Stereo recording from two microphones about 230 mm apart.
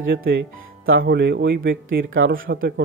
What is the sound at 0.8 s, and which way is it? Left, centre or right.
A man's voice, right.